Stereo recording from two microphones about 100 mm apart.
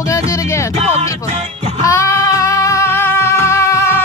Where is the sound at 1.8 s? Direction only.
30° left (ahead or behind).